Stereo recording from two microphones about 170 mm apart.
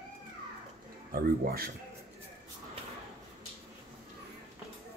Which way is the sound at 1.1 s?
60° right (ahead or behind).